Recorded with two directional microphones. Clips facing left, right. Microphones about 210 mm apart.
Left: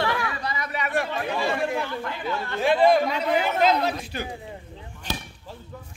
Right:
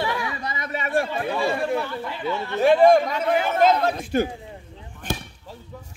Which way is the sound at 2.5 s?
45° right (ahead or behind).